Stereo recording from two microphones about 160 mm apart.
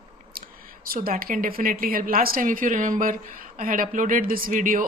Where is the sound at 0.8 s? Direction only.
65° right (ahead or behind).